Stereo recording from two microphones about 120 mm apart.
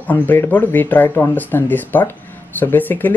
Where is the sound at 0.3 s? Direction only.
15° left (ahead or behind).